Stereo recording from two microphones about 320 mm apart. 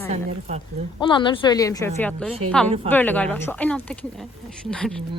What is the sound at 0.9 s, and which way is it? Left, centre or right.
A woman's voice, centre.